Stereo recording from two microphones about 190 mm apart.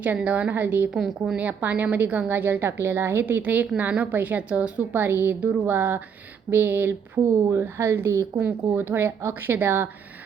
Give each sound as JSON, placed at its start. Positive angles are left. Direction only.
{"t": 0.0, "sound": "a woman's voice", "side_deg": -10}